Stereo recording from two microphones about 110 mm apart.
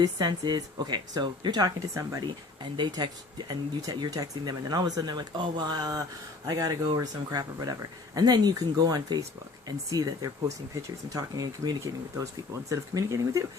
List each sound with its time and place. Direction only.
0.0 s speech: 40° right (ahead or behind)